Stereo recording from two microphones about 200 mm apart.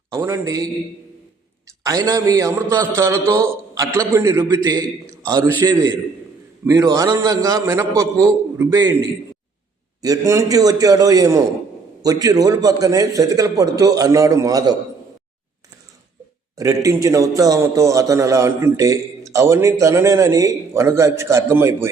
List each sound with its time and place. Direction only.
0.1 s a man's voice: 15° right (ahead or behind)
1.8 s a man's voice: 15° right (ahead or behind)
16.6 s a man's voice: 15° right (ahead or behind)